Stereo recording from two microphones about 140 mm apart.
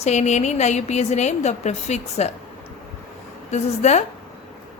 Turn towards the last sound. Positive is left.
turn(degrees=55)  # may be behind; listen again after turning